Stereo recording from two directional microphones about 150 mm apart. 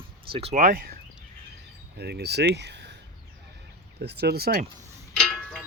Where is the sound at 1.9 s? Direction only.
90° right.